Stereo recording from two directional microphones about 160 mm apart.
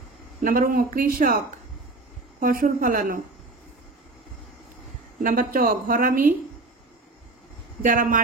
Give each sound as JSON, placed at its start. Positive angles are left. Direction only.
{"t": 0.4, "sound": "a woman's voice", "side_deg": -60}
{"t": 2.4, "sound": "a woman's voice", "side_deg": -60}
{"t": 5.2, "sound": "a woman's voice", "side_deg": -60}
{"t": 7.8, "sound": "a woman's voice", "side_deg": -60}